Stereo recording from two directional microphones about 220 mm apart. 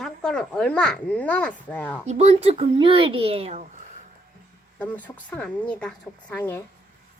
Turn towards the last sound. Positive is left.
turn(degrees=10)  # may be behind; listen again after turning